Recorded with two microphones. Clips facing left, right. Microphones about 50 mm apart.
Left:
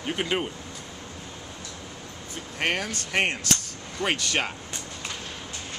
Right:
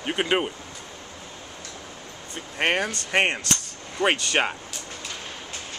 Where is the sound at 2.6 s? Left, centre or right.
Right.